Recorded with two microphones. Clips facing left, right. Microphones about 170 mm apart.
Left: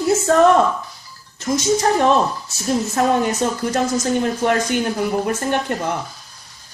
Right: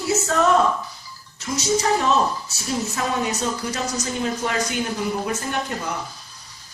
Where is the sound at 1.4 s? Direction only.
50° left (ahead or behind).